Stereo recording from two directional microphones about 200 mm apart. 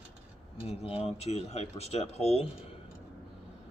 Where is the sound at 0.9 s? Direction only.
30° left (ahead or behind).